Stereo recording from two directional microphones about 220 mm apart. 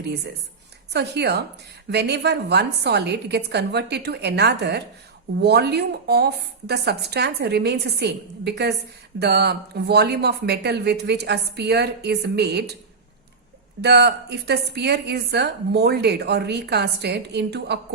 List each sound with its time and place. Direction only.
0.9 s a woman's voice: 50° right (ahead or behind)
13.8 s a woman's voice: 50° right (ahead or behind)